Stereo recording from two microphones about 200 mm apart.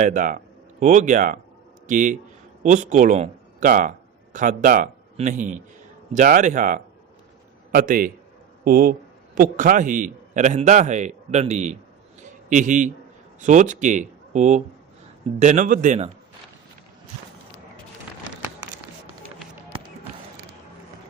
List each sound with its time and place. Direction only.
0.0 s a man's voice: 40° right (ahead or behind)